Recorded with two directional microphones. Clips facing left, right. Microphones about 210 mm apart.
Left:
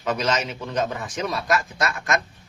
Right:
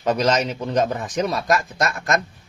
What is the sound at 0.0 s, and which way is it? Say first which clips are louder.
A man's voice: right 5 dB; 35° right (ahead or behind).